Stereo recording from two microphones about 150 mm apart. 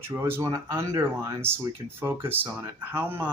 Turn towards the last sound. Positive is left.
turn(degrees=-10)  # may be behind; listen again after turning